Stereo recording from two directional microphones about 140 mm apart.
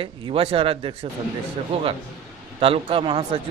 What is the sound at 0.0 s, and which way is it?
A man's voice, 40° right (ahead or behind).